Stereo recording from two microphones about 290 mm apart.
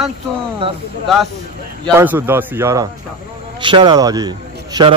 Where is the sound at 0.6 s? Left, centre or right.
Centre.